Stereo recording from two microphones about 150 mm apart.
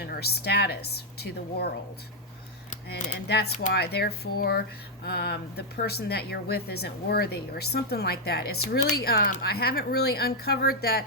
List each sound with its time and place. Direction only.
0.0 s a woman's voice: 90° left
2.9 s a woman's voice: 90° left